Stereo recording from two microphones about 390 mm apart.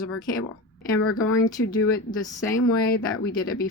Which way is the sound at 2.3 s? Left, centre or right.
Centre.